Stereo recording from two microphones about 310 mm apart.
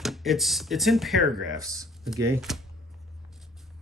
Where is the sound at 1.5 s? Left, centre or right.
Centre.